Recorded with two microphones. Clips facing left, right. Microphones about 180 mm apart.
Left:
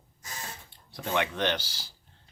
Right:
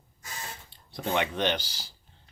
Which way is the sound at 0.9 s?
20° right (ahead or behind).